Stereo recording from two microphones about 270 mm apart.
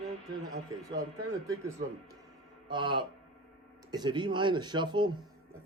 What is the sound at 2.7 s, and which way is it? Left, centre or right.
A man's voice, centre.